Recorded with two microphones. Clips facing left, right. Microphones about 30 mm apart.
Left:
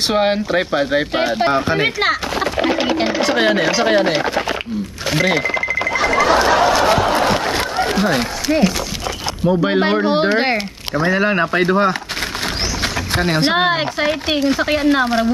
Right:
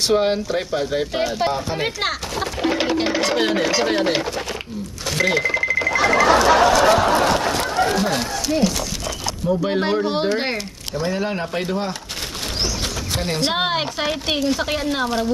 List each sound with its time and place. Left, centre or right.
0.1 s speech: left
1.8 s a woman's voice: centre
2.3 s speech: left
2.9 s a woman's voice: centre
3.3 s speech: left
4.2 s speech: left
5.1 s a sound: centre
7.9 s speech: left
11.1 s speech: left
13.1 s speech: left
13.5 s a woman's voice: centre